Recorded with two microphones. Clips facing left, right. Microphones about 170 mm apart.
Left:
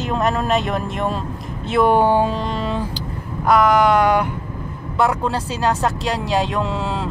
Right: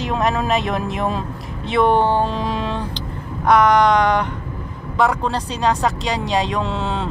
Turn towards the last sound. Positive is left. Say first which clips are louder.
# even
turn(degrees=0)  # may be behind; listen again after turning